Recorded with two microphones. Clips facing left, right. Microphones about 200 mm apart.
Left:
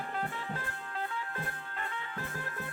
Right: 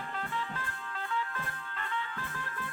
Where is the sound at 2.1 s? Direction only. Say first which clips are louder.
Left 1 dB; 45° left (ahead or behind).